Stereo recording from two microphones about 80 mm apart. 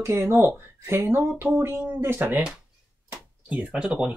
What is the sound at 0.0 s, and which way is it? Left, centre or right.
Speech, right.